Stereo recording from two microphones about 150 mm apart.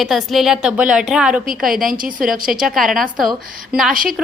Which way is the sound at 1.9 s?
65° right (ahead or behind).